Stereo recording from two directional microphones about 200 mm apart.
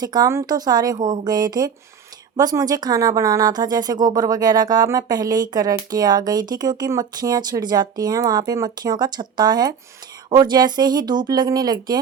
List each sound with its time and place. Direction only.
0.0 s speech: 20° right (ahead or behind)